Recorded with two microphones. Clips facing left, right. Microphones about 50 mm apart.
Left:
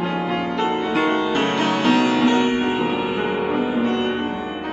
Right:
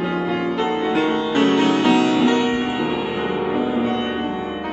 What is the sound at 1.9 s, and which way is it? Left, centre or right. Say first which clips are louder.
Music: right 1 dB; left.